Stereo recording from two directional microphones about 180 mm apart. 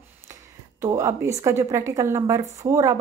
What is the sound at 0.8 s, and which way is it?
A woman's voice, 15° right (ahead or behind).